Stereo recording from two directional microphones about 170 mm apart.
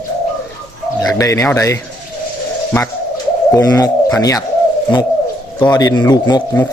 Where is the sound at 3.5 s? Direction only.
20° left (ahead or behind).